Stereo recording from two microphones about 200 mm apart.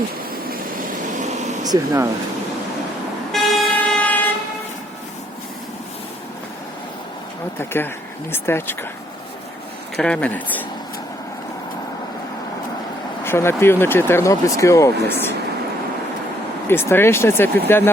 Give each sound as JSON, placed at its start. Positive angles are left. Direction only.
{"t": 1.6, "sound": "speech", "side_deg": -15}
{"t": 3.3, "sound": "vehicle", "side_deg": 0}
{"t": 7.6, "sound": "speech", "side_deg": 10}
{"t": 10.0, "sound": "speech", "side_deg": 5}
{"t": 13.2, "sound": "speech", "side_deg": 10}
{"t": 16.6, "sound": "speech", "side_deg": 10}